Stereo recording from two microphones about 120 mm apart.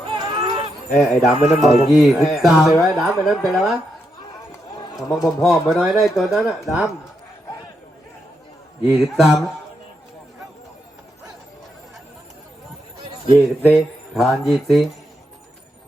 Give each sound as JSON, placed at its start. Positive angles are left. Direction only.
{"t": 0.1, "sound": "honk", "side_deg": -40}
{"t": 0.9, "sound": "mantra", "side_deg": 0}
{"t": 5.0, "sound": "speech", "side_deg": 30}
{"t": 5.5, "sound": "mantra", "side_deg": 0}
{"t": 8.8, "sound": "mantra", "side_deg": -5}
{"t": 13.7, "sound": "mantra", "side_deg": 0}